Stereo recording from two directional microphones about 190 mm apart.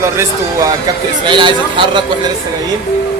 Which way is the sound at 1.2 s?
25° right (ahead or behind).